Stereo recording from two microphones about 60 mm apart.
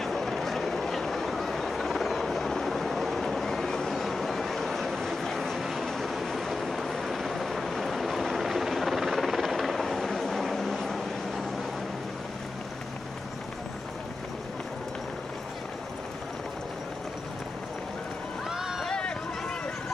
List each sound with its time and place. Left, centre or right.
0.0 s a sound: centre
18.5 s run: centre
18.9 s run: centre